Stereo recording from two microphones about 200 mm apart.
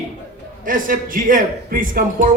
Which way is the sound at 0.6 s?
45° right (ahead or behind).